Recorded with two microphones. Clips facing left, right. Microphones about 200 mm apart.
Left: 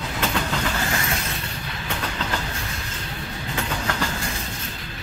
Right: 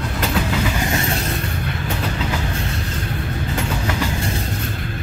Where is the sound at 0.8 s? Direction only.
25° right (ahead or behind).